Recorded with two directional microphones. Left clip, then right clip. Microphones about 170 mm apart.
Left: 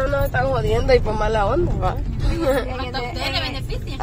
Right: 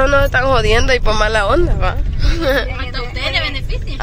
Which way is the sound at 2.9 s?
90° left.